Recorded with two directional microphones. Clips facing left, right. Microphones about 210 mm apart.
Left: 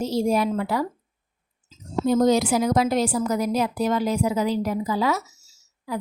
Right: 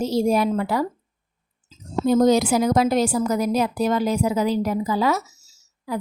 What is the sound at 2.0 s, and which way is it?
A woman's voice, 45° right (ahead or behind).